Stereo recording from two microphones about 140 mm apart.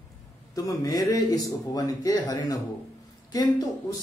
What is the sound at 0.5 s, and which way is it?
Speech, 25° left (ahead or behind).